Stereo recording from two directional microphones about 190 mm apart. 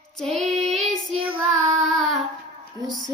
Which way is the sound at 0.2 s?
Centre (ahead or behind).